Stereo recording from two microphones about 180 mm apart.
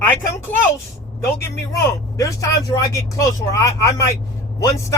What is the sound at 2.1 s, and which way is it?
Speech, 15° left (ahead or behind).